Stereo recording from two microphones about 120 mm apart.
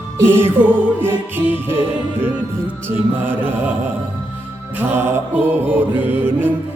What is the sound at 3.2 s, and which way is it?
Music, 15° right (ahead or behind).